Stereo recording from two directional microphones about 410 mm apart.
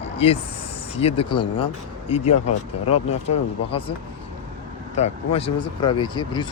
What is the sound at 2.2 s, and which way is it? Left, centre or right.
Speech, left.